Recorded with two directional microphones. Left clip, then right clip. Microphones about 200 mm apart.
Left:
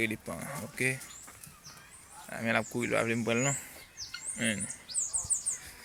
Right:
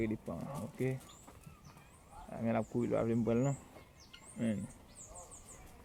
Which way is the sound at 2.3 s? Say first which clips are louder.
Left 5 dB; 15° left (ahead or behind).